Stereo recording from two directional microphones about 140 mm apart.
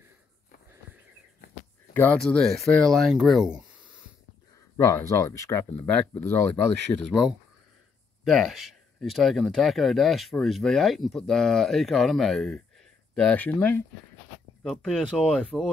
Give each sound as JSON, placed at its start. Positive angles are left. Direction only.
{"t": 2.1, "sound": "speech", "side_deg": 5}
{"t": 4.7, "sound": "speech", "side_deg": 20}
{"t": 7.1, "sound": "speech", "side_deg": 0}